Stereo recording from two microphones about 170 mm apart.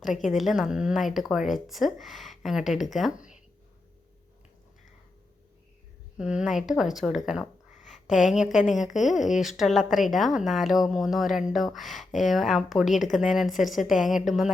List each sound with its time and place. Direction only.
0.2 s a woman's voice: centre (ahead or behind)
6.1 s a woman's voice: 5° right (ahead or behind)
8.4 s a woman's voice: 45° left (ahead or behind)
8.7 s a woman's voice: centre (ahead or behind)